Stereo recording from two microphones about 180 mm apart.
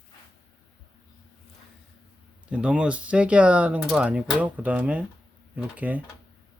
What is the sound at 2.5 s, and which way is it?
Speech, 5° right (ahead or behind).